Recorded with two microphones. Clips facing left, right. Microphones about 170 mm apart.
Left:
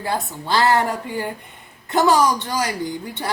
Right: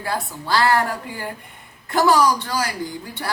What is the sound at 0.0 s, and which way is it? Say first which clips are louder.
A woman's voice: left 2 dB; 20° left (ahead or behind).